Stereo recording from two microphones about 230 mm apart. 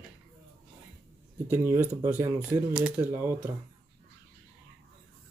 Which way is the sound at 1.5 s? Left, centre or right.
Centre.